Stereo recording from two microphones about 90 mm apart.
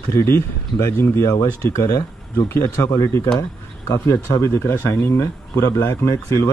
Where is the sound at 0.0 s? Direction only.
25° left (ahead or behind).